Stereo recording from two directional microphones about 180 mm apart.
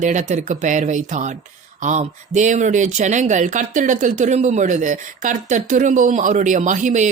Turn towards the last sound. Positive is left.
turn(degrees=-45)  # may be behind; listen again after turning